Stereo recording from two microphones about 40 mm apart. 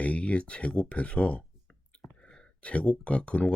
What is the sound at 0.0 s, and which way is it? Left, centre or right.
Speech, left.